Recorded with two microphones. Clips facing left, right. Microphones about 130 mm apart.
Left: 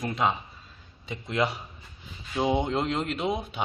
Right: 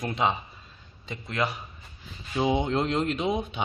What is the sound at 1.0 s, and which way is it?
Speech, 10° left (ahead or behind).